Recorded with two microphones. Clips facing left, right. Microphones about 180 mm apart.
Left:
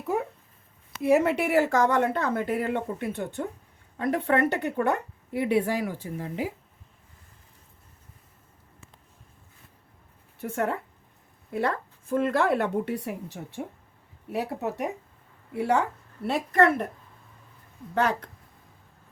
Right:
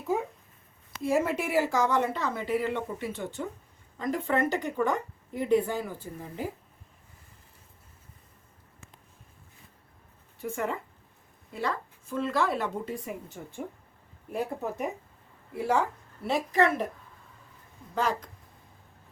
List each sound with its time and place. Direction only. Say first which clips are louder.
0.1 s speech: even; 65° left (ahead or behind); by 6.5 s 85° left
10.4 s speech: left 3 dB; 65° left (ahead or behind)
17.9 s speech: left 3 dB; 65° left (ahead or behind)